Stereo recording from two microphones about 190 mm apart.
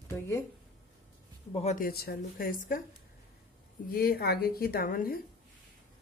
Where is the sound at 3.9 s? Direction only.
55° left (ahead or behind).